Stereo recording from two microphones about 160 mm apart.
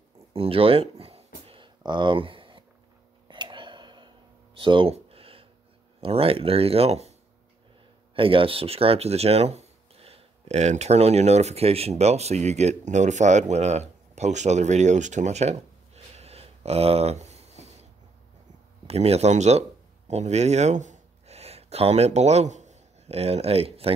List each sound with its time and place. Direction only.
0.3 s a sound: 35° right (ahead or behind)
5.9 s speech: 35° right (ahead or behind)
18.9 s speech: 40° right (ahead or behind)